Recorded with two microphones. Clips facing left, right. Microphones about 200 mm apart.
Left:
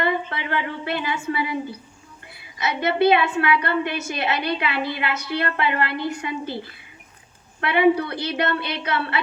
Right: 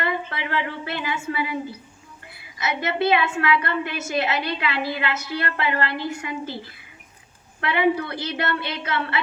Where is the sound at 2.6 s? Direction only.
35° left (ahead or behind).